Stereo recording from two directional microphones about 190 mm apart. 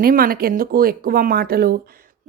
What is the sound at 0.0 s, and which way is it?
Speech, 50° right (ahead or behind).